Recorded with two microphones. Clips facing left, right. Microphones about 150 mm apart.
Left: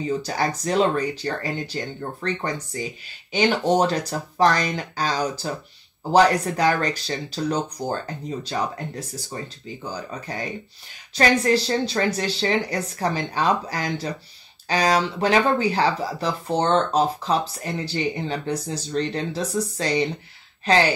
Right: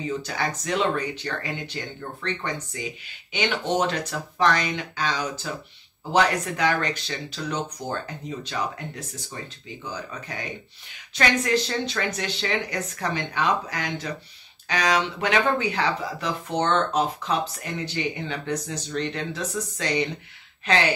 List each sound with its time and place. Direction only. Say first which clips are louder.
0.0 s speech: left 4 dB; 35° left (ahead or behind)